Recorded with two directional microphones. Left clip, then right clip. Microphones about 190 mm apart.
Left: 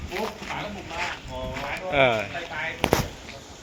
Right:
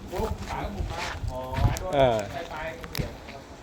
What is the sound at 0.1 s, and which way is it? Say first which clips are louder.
Speech: left 1 dB; 60° right (ahead or behind).